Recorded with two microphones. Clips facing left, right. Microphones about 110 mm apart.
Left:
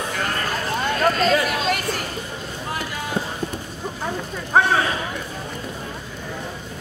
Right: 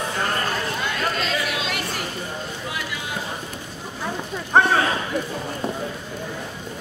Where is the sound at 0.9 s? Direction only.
45° left (ahead or behind).